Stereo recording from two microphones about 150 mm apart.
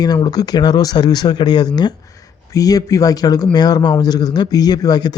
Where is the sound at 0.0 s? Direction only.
25° left (ahead or behind).